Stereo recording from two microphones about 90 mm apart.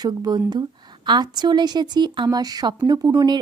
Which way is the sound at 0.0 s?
50° right (ahead or behind).